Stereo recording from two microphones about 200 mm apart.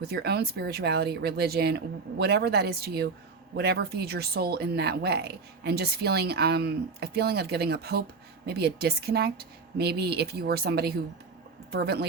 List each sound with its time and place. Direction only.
0.1 s speech: 55° right (ahead or behind)